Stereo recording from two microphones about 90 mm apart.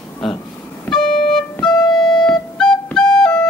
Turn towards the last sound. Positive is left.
turn(degrees=10)  # may be behind; listen again after turning